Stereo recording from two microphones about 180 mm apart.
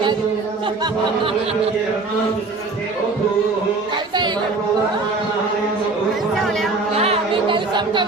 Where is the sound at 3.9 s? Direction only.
25° right (ahead or behind).